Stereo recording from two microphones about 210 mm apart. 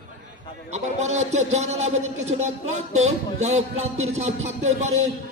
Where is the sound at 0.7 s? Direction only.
30° right (ahead or behind).